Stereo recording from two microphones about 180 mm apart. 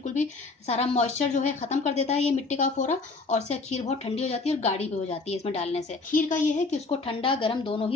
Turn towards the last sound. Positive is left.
turn(degrees=30)  # may be behind; listen again after turning